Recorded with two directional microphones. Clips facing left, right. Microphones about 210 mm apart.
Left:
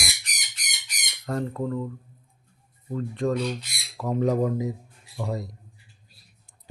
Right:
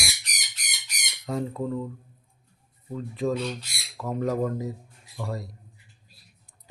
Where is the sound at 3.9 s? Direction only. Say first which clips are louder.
Left 3 dB; 10° left (ahead or behind).